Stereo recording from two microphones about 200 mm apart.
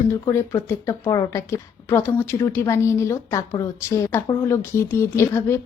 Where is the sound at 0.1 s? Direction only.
15° left (ahead or behind).